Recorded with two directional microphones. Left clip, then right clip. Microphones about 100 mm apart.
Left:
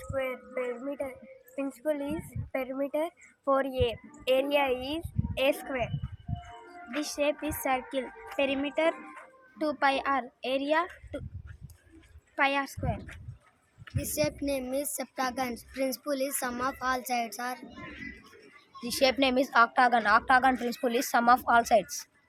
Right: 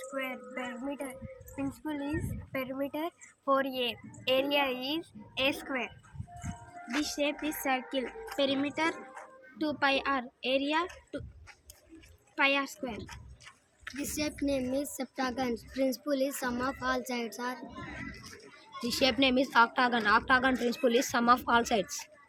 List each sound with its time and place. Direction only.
0.2 s a woman's voice: 40° left (ahead or behind)
7.0 s a woman's voice: 40° left (ahead or behind)
12.4 s a woman's voice: 35° left (ahead or behind)
18.9 s a woman's voice: 60° left (ahead or behind); by 21.9 s 35° left (ahead or behind)